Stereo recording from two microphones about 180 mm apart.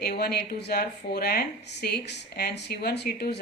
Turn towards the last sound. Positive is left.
turn(degrees=65)  # may be behind; listen again after turning